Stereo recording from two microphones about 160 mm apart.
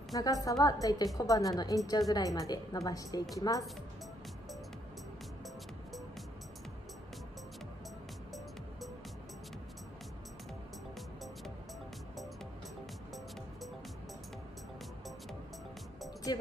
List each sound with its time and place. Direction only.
0.1 s a woman's voice: 20° left (ahead or behind)